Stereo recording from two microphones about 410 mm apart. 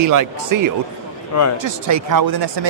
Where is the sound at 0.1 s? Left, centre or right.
Right.